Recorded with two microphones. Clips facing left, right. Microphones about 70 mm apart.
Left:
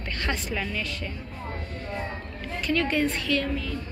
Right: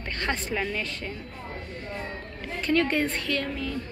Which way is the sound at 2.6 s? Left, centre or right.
Right.